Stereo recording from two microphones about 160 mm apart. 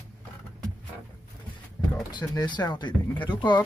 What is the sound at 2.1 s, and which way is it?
Speech, 30° left (ahead or behind).